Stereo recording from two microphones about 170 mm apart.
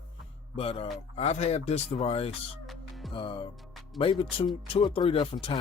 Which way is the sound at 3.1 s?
30° left (ahead or behind).